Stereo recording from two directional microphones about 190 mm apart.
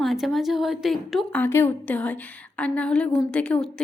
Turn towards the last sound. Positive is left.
turn(degrees=5)  # may be behind; listen again after turning